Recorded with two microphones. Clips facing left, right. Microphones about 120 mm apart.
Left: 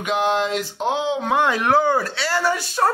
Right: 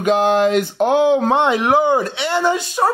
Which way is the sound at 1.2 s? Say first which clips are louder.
Right 4 dB; 25° right (ahead or behind).